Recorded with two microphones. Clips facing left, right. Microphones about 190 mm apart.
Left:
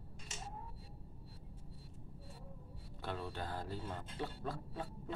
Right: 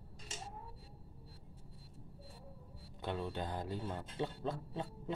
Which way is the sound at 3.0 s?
20° right (ahead or behind).